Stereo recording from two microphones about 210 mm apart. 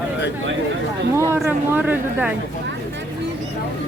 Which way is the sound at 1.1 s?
15° right (ahead or behind).